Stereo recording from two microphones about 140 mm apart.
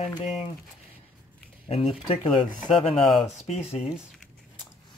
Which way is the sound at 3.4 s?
50° left (ahead or behind).